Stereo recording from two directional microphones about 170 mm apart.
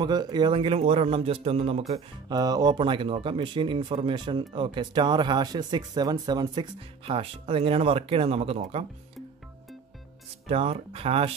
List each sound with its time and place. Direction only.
0.0 s speech: 25° right (ahead or behind)
2.2 s speech: 20° right (ahead or behind)
10.5 s speech: 35° right (ahead or behind)